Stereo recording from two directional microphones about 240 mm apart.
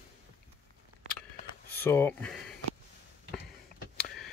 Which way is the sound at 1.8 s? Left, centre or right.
Centre.